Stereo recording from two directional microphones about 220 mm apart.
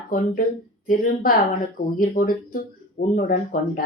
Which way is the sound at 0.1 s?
40° left (ahead or behind).